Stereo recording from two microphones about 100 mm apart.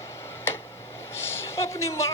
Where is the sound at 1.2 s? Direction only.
25° left (ahead or behind).